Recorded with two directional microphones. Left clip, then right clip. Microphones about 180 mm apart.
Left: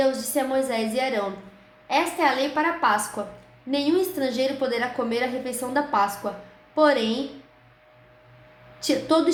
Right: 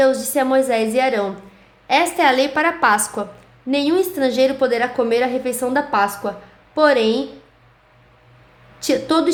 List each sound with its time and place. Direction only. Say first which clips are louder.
0.0 s a woman's voice: right 7 dB; 45° right (ahead or behind)
1.9 s a woman's voice: right 7 dB; 60° right (ahead or behind); by 7.0 s 45° right (ahead or behind)
8.8 s a woman's voice: right 4 dB; 40° right (ahead or behind)